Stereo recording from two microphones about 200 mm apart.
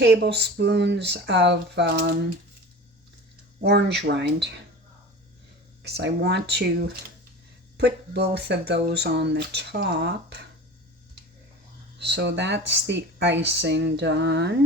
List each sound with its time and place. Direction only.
0.0 s speech: 55° right (ahead or behind)
3.6 s speech: 60° right (ahead or behind)
5.8 s speech: 60° right (ahead or behind)
11.9 s speech: 60° right (ahead or behind)